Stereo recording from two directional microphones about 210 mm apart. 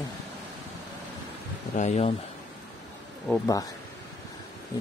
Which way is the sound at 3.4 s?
15° left (ahead or behind).